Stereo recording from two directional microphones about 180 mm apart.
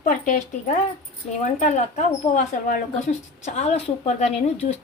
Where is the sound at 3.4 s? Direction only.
40° left (ahead or behind).